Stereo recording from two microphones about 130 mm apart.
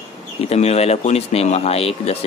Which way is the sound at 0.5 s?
55° left (ahead or behind).